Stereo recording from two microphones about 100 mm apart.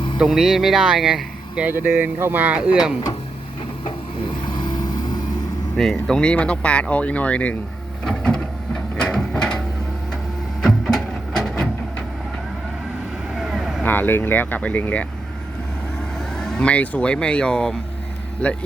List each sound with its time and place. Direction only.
0.2 s speech: 5° right (ahead or behind)
4.4 s vehicle: 45° left (ahead or behind)
5.7 s speech: 5° left (ahead or behind)
8.0 s printer: 10° left (ahead or behind)
9.0 s a sound: 5° left (ahead or behind)
10.6 s music: 5° left (ahead or behind)
13.3 s vehicle: 5° right (ahead or behind)
13.8 s speech: 20° left (ahead or behind)
16.3 s speech: 5° left (ahead or behind)